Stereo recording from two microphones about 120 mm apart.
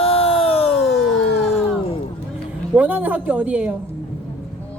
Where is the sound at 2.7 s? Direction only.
10° right (ahead or behind).